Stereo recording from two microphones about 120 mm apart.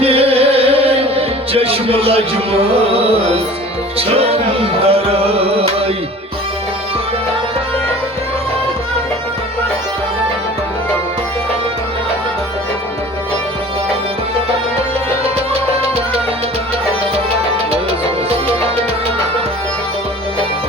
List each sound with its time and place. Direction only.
0.0 s music: 55° right (ahead or behind)